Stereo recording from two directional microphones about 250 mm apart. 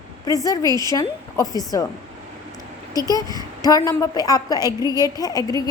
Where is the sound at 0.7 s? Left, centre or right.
Centre.